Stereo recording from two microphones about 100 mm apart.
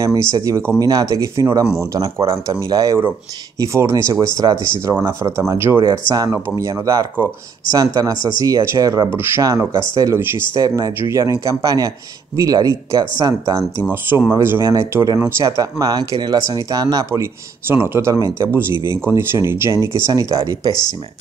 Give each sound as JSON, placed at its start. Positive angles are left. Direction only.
{"t": 0.4, "sound": "speech", "side_deg": -30}